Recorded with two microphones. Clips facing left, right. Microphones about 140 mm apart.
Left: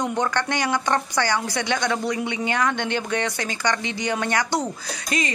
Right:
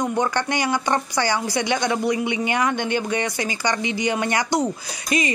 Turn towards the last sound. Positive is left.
turn(degrees=-10)  # may be behind; listen again after turning